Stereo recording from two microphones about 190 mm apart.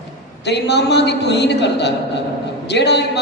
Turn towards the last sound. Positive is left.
turn(degrees=65)  # may be behind; listen again after turning